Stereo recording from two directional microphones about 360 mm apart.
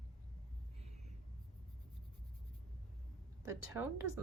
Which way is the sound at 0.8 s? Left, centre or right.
Centre.